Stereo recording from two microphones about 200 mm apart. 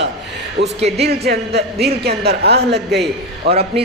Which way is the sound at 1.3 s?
55° right (ahead or behind).